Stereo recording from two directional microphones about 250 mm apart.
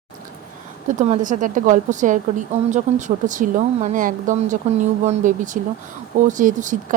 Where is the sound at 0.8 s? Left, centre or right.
Right.